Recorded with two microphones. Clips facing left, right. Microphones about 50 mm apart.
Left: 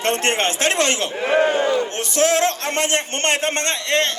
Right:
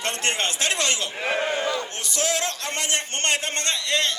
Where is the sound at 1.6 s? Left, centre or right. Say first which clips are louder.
Left 7 dB; left.